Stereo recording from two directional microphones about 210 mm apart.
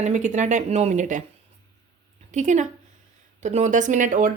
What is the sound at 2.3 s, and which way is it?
A woman's voice, 35° right (ahead or behind).